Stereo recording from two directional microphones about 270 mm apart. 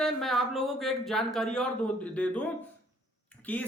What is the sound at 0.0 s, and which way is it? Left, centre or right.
Speech, centre.